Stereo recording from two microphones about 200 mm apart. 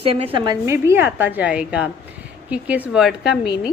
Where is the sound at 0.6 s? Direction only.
15° right (ahead or behind).